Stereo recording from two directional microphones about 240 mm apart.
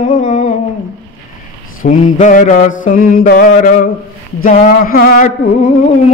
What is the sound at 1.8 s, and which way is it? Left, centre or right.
Music, left.